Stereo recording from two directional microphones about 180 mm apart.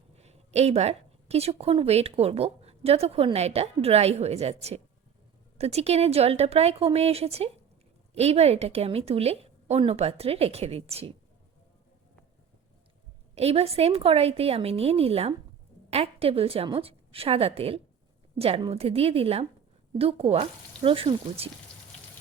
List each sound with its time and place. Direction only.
0.2 s a woman's voice: 35° right (ahead or behind)
13.3 s a woman's voice: 35° right (ahead or behind)